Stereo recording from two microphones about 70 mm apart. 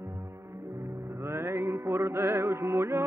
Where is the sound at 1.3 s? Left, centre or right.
Right.